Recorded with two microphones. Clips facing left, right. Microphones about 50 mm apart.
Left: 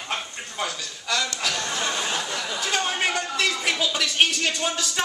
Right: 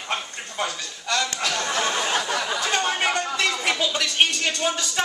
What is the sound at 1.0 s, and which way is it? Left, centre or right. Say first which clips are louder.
Speech: right 1 dB; centre.